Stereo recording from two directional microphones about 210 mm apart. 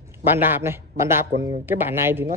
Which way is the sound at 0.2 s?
10° right (ahead or behind).